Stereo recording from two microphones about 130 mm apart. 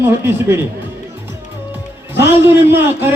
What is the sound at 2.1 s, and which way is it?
A man's voice, 15° right (ahead or behind).